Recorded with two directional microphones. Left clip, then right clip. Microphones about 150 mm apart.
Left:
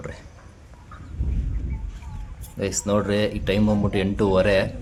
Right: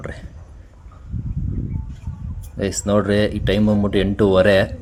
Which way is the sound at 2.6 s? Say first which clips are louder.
Right 4 dB; 20° right (ahead or behind).